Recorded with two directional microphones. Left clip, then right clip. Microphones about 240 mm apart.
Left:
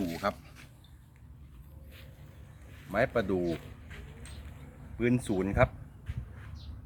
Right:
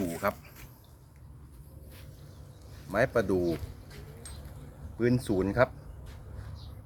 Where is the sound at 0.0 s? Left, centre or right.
Centre.